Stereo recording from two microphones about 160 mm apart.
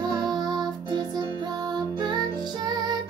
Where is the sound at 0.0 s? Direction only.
25° right (ahead or behind).